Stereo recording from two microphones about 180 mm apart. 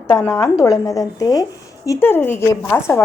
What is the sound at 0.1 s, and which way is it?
A woman's voice, 10° left (ahead or behind).